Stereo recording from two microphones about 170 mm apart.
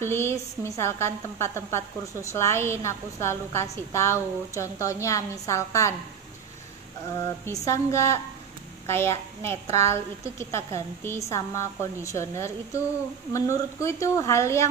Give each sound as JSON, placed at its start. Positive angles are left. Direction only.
{"t": 0.0, "sound": "a woman's voice", "side_deg": 15}
{"t": 7.4, "sound": "a woman's voice", "side_deg": 20}